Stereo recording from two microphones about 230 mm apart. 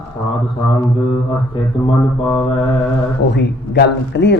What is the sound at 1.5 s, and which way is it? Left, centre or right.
Speech, left.